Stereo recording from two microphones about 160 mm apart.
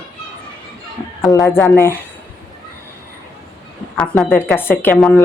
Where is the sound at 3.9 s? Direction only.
5° left (ahead or behind).